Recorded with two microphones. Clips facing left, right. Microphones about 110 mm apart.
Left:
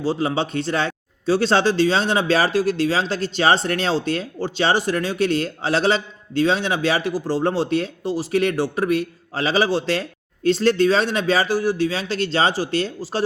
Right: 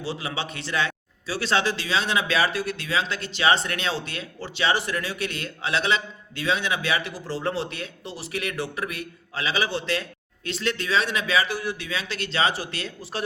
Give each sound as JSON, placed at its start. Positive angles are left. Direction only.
{"t": 0.0, "sound": "speech", "side_deg": 40}